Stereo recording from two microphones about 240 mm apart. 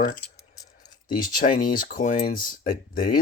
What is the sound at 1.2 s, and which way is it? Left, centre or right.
Speech, left.